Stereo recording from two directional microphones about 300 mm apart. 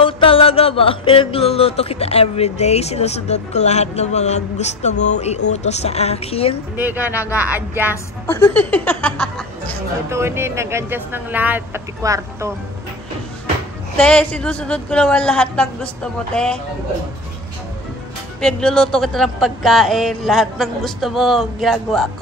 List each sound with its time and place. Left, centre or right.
0.0 s music: centre
5.5 s a woman's voice: left
6.8 s speech: centre
7.9 s speech: centre
10.0 s speech: centre
13.9 s speech: centre
18.4 s speech: centre